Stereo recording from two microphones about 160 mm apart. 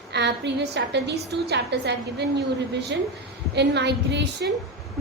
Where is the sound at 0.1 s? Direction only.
90° right.